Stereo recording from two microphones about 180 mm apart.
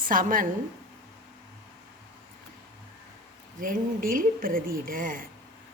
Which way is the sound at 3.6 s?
50° right (ahead or behind).